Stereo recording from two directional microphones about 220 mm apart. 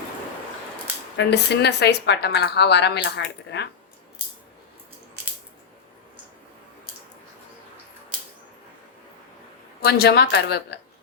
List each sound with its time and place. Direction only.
1.1 s a woman's voice: 50° left (ahead or behind)
9.8 s a woman's voice: 45° left (ahead or behind)